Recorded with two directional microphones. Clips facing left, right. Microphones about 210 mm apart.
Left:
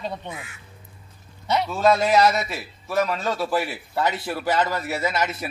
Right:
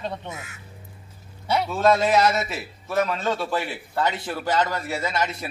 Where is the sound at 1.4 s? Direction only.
5° right (ahead or behind).